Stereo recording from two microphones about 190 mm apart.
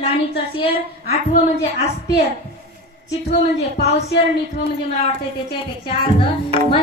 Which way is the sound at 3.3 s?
60° left (ahead or behind).